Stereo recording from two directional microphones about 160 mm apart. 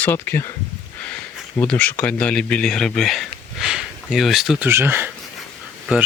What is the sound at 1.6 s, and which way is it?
Speech, 10° left (ahead or behind).